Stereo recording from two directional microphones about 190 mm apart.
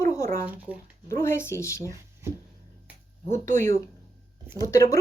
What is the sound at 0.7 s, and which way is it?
Speech, 5° right (ahead or behind).